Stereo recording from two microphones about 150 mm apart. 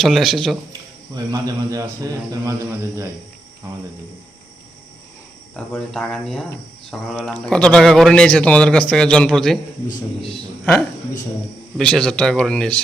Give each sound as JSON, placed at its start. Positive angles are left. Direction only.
{"t": 0.0, "sound": "speech", "side_deg": 0}
{"t": 1.1, "sound": "a man's voice", "side_deg": -25}
{"t": 5.5, "sound": "a man's voice", "side_deg": 10}
{"t": 11.8, "sound": "a man's voice", "side_deg": 5}